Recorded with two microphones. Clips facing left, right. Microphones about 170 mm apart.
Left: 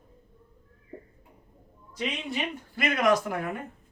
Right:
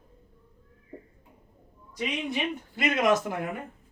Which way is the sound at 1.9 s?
20° right (ahead or behind).